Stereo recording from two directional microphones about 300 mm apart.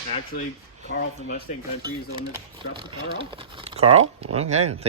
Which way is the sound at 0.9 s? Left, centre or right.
Left.